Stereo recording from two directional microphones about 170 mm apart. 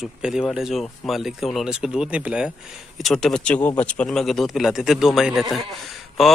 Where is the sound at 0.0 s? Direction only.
Centre (ahead or behind).